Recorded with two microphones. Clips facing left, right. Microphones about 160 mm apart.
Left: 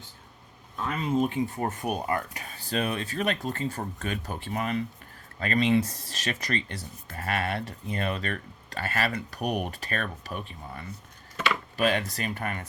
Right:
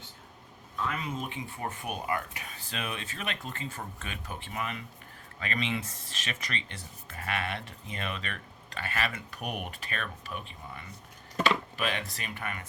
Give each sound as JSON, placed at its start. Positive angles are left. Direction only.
{"t": 1.0, "sound": "speech", "side_deg": 35}